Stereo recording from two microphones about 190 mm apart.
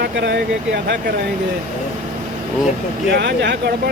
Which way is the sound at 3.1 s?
65° right (ahead or behind).